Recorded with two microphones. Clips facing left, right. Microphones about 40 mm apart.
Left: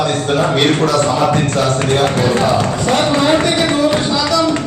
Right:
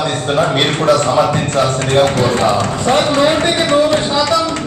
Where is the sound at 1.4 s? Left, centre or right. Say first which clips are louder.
Right 1 dB; centre.